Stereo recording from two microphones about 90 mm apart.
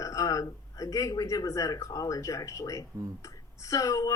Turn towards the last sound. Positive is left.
turn(degrees=40)  # may be behind; listen again after turning